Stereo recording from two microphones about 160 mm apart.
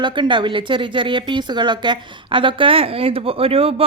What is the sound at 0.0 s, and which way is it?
A woman's voice, 30° right (ahead or behind).